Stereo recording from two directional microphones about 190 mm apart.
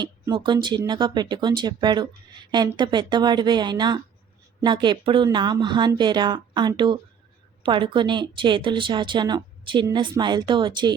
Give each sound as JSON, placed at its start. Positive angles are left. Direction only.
{"t": 0.0, "sound": "a woman's voice", "side_deg": -25}